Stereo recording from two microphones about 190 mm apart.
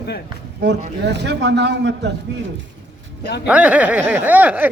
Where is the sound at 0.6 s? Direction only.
65° right (ahead or behind).